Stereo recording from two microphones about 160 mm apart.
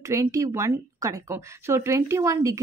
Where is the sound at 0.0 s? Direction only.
20° right (ahead or behind).